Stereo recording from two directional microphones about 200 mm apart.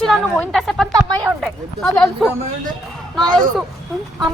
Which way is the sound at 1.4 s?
Centre (ahead or behind).